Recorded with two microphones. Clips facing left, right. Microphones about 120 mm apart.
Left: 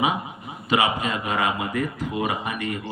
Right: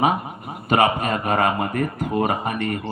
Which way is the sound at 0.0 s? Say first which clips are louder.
Right 4 dB; 50° right (ahead or behind).